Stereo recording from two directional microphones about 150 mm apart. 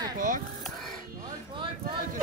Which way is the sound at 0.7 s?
Centre (ahead or behind).